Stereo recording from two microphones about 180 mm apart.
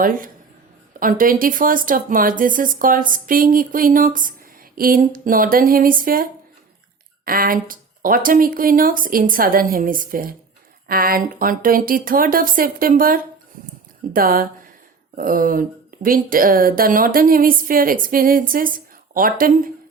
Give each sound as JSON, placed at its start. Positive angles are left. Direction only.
{"t": 0.9, "sound": "speech", "side_deg": -50}
{"t": 7.3, "sound": "speech", "side_deg": -55}